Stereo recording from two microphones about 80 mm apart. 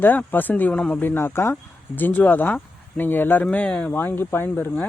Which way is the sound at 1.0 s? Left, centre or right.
Left.